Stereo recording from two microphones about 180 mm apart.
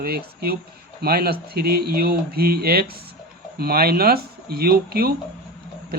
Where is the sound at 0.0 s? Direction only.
60° right (ahead or behind).